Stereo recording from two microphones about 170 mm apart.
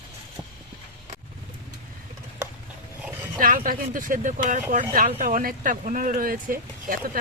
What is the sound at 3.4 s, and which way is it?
Speech, 55° right (ahead or behind).